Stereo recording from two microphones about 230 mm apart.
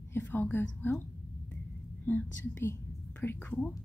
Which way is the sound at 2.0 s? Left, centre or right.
Centre.